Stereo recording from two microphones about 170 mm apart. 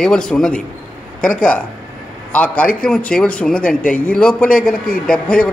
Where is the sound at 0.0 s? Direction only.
5° left (ahead or behind).